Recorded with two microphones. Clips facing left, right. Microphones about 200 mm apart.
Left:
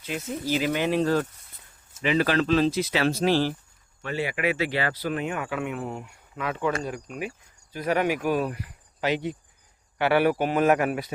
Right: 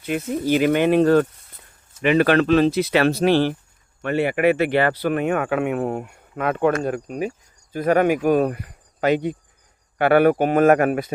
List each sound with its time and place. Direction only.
0.0 s speech: 60° right (ahead or behind)